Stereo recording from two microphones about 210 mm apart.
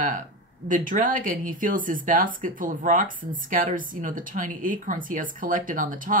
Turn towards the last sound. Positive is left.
turn(degrees=-40)  # may be behind; listen again after turning